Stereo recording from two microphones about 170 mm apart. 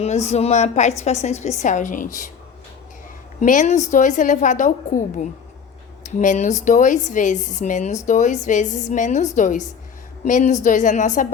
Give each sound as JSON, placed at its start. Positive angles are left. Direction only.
{"t": 0.0, "sound": "a woman's voice", "side_deg": 40}
{"t": 3.4, "sound": "a woman's voice", "side_deg": 45}